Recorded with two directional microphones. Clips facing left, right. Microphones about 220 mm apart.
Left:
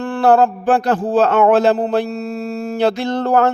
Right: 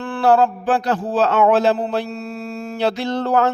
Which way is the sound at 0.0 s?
45° left (ahead or behind).